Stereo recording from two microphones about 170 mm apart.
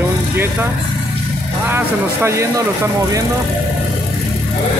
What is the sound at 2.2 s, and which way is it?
Speech, 15° right (ahead or behind).